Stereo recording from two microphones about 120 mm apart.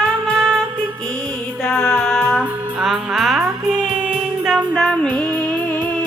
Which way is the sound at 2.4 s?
5° right (ahead or behind).